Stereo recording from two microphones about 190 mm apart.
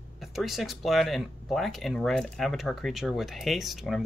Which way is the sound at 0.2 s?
Centre (ahead or behind).